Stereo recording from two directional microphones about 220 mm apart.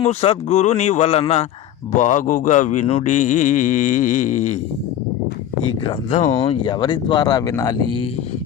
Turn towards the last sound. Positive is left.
turn(degrees=15)  # may be behind; listen again after turning